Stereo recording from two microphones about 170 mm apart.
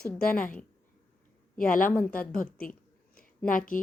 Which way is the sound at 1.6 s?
55° left (ahead or behind).